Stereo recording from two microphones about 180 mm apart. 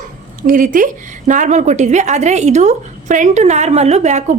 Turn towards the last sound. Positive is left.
turn(degrees=-40)  # may be behind; listen again after turning